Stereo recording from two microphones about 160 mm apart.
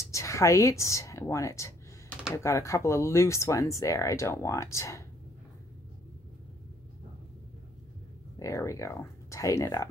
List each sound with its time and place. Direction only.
0.1 s speech: 20° left (ahead or behind)
8.4 s speech: 20° left (ahead or behind)